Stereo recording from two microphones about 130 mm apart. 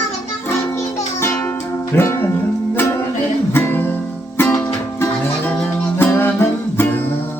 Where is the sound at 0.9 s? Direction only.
15° left (ahead or behind).